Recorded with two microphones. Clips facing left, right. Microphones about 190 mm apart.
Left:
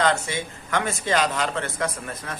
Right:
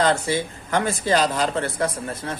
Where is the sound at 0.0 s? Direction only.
35° right (ahead or behind).